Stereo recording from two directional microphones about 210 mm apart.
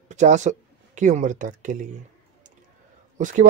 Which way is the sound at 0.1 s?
35° right (ahead or behind).